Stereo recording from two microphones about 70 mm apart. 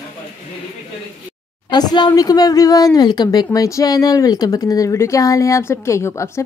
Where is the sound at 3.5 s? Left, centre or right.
Left.